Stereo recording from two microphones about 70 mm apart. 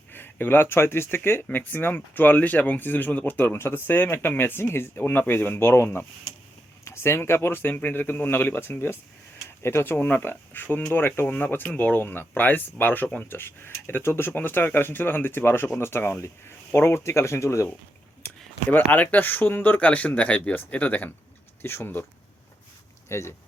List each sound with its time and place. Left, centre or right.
0.1 s speech: left
7.7 s speech: left
11.9 s speech: left
18.7 s speech: left
21.6 s speech: left
23.0 s speech: left